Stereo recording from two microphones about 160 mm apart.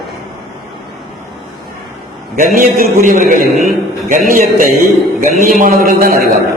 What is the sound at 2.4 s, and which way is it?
Speech, 60° right (ahead or behind).